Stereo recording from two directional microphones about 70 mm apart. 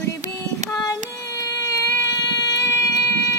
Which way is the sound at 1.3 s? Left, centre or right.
Left.